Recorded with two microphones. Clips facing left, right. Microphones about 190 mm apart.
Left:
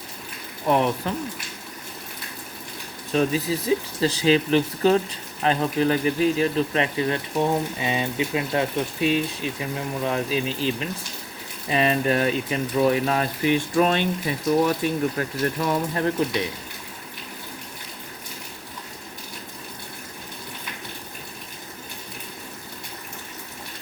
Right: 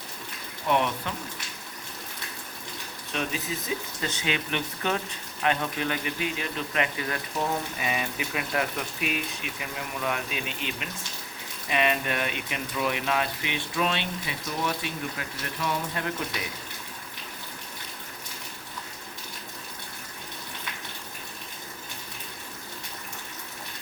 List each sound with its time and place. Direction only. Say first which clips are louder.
0.7 s speech: left 5 dB; 35° left (ahead or behind)
3.1 s speech: left 10 dB; 35° left (ahead or behind)